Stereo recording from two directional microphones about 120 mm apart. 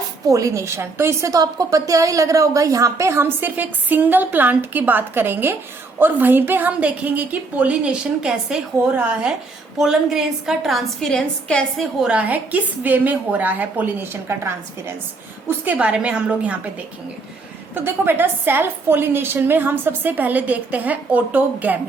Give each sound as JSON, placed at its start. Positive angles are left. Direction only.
{"t": 0.3, "sound": "a woman's voice", "side_deg": -25}
{"t": 12.0, "sound": "a woman's voice", "side_deg": -10}
{"t": 17.8, "sound": "a woman's voice", "side_deg": -15}